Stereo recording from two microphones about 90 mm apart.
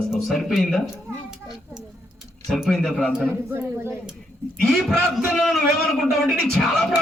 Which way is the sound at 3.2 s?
25° right (ahead or behind).